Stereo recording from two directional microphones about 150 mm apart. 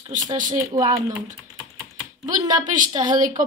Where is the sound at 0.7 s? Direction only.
20° right (ahead or behind).